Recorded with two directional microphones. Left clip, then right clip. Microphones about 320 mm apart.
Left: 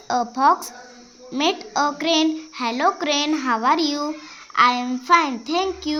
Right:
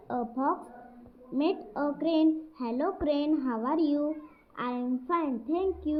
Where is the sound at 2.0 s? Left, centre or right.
Left.